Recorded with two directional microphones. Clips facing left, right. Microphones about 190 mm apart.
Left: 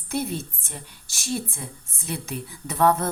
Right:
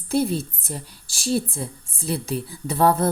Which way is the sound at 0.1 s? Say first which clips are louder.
Right 6 dB; 30° right (ahead or behind).